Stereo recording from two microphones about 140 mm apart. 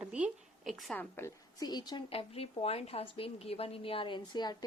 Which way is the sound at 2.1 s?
45° left (ahead or behind).